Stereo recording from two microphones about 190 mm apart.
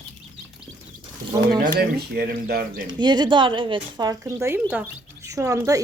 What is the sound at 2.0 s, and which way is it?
Speech, 55° right (ahead or behind).